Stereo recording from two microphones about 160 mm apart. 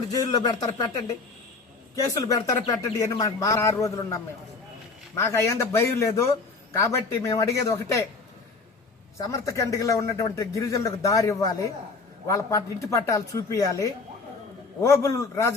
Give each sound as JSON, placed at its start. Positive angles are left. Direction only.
{"t": 0.1, "sound": "a man's voice", "side_deg": 25}
{"t": 2.0, "sound": "a man's voice", "side_deg": 20}
{"t": 9.1, "sound": "a man's voice", "side_deg": 20}